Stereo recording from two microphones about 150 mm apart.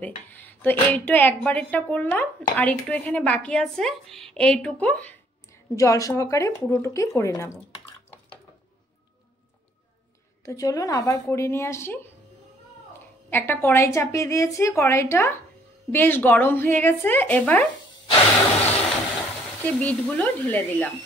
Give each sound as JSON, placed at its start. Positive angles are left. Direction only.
{"t": 0.0, "sound": "speech", "side_deg": 10}
{"t": 10.4, "sound": "a woman's voice", "side_deg": 20}
{"t": 13.3, "sound": "a woman's voice", "side_deg": 15}
{"t": 19.6, "sound": "speech", "side_deg": 10}